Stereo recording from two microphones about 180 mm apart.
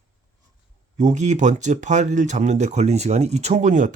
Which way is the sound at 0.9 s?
45° right (ahead or behind).